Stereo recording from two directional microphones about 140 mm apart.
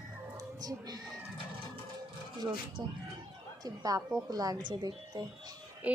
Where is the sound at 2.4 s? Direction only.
30° right (ahead or behind).